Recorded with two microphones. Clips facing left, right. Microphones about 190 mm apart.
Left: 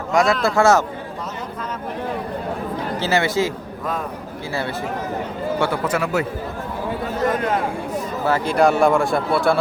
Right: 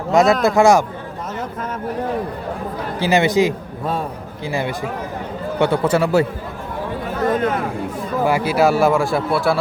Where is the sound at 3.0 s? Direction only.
15° right (ahead or behind).